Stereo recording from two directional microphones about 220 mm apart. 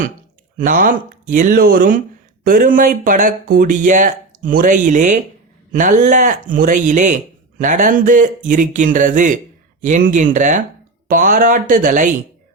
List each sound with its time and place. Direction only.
0.6 s speech: 40° right (ahead or behind)